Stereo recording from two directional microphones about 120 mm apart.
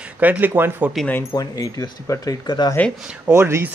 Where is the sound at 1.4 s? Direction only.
25° left (ahead or behind).